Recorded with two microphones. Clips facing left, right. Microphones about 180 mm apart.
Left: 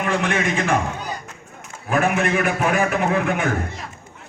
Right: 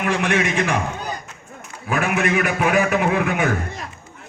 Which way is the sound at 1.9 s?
45° left (ahead or behind).